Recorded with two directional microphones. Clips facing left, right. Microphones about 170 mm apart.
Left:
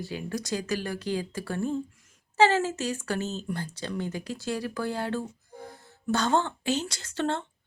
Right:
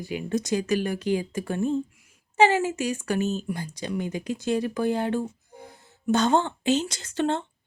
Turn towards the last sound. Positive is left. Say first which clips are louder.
# right 4 dB
turn(degrees=-15)  # may be behind; listen again after turning